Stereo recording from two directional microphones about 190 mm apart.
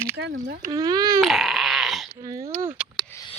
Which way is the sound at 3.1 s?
15° left (ahead or behind).